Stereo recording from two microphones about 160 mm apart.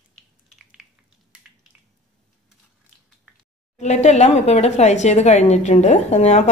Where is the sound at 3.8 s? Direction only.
45° left (ahead or behind).